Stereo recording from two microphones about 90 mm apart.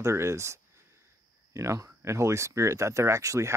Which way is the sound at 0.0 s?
30° right (ahead or behind).